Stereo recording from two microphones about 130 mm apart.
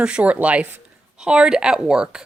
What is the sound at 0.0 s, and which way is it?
A woman's voice, 10° right (ahead or behind).